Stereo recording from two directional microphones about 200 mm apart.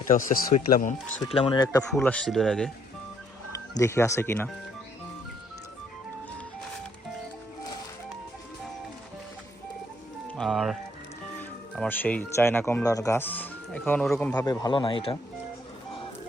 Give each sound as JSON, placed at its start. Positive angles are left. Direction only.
{"t": 0.1, "sound": "speech", "side_deg": 40}
{"t": 1.2, "sound": "speech", "side_deg": 20}
{"t": 1.9, "sound": "speech", "side_deg": 5}
{"t": 3.8, "sound": "speech", "side_deg": 15}
{"t": 10.2, "sound": "speech", "side_deg": 5}
{"t": 14.3, "sound": "speech", "side_deg": 20}